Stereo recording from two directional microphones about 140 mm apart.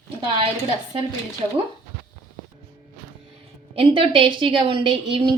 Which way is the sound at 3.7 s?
40° right (ahead or behind).